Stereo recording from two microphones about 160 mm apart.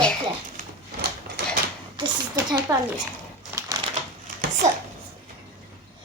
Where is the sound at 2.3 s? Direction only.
25° right (ahead or behind).